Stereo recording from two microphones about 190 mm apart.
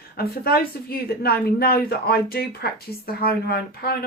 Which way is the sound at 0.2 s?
55° left (ahead or behind).